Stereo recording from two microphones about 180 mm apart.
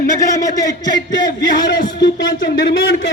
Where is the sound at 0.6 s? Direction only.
20° left (ahead or behind).